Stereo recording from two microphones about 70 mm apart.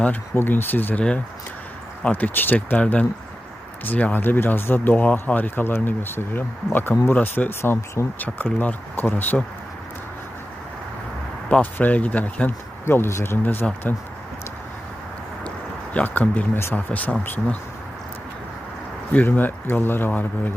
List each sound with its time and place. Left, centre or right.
0.3 s speech: left
2.0 s speech: left
11.6 s speech: left
12.8 s speech: left
15.4 s a sound: centre
16.7 s speech: left
19.1 s speech: left